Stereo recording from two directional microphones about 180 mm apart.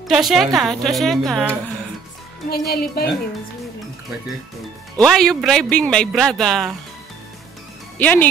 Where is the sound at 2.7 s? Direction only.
60° left (ahead or behind).